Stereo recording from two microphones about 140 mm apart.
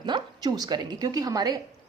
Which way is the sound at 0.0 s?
30° right (ahead or behind).